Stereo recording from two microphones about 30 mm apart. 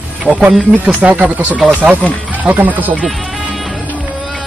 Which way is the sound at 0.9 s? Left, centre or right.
Right.